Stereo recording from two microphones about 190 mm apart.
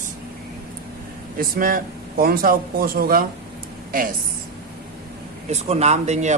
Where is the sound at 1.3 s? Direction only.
50° right (ahead or behind).